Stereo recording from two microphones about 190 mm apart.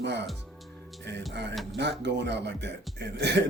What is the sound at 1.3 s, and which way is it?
Speech, 60° right (ahead or behind).